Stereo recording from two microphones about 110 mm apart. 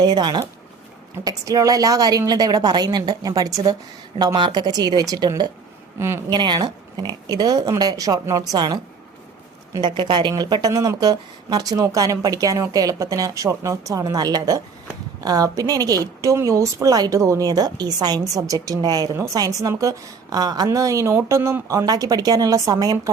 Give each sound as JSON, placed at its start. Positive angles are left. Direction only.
{"t": 0.0, "sound": "a woman's voice", "side_deg": -40}
{"t": 6.0, "sound": "a woman's voice", "side_deg": -25}
{"t": 6.3, "sound": "a woman's voice", "side_deg": -45}
{"t": 9.8, "sound": "a woman's voice", "side_deg": -45}